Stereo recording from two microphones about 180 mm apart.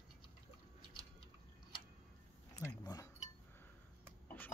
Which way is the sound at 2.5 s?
20° left (ahead or behind).